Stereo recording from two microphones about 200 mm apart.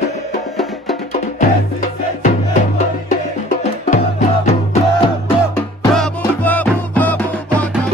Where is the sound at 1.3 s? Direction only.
40° left (ahead or behind).